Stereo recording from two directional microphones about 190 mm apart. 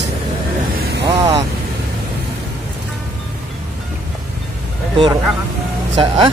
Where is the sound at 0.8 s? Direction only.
60° right (ahead or behind).